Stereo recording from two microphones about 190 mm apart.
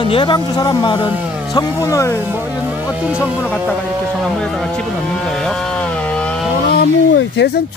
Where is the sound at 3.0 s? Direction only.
5° right (ahead or behind).